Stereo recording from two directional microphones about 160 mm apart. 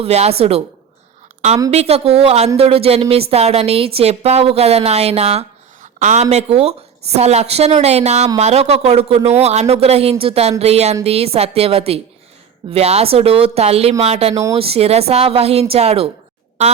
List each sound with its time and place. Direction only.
0.0 s a woman's voice: 40° right (ahead or behind)
1.7 s a woman's voice: 40° right (ahead or behind)
6.3 s a woman's voice: 40° right (ahead or behind)